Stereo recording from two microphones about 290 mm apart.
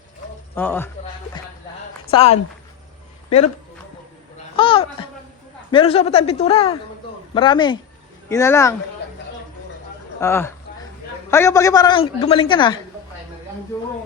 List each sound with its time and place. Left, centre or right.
0.5 s a woman's voice: centre
2.1 s a woman's voice: centre
4.5 s a sound: centre
5.7 s a woman's voice: centre
10.2 s a woman's voice: centre